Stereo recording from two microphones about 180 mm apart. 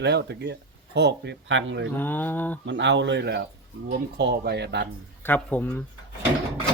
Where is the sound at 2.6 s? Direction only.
85° right; by 4.9 s 70° right (ahead or behind).